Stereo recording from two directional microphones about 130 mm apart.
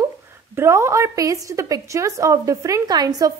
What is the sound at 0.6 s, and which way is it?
A woman's voice, 20° right (ahead or behind).